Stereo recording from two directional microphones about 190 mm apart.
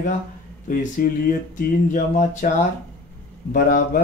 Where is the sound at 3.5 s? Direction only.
45° left (ahead or behind).